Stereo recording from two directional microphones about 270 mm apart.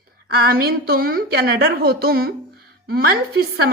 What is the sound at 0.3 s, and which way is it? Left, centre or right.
A woman's voice, right.